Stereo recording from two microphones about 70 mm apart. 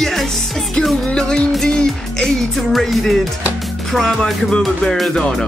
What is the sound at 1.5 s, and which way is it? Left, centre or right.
Speech, centre.